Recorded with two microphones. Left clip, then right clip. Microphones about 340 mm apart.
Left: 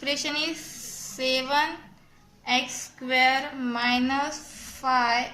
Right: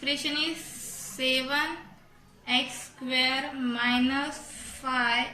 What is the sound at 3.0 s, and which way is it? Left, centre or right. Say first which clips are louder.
A woman's voice: left 5 dB; centre.